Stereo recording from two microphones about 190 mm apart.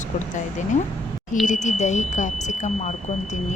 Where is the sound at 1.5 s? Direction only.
40° left (ahead or behind).